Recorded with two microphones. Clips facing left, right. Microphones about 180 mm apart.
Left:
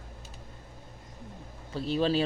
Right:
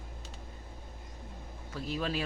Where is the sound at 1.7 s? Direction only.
30° left (ahead or behind).